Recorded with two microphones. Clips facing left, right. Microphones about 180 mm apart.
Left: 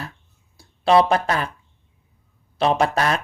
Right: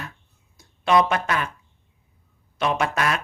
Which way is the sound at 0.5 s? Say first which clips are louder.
Left 3 dB; 30° left (ahead or behind).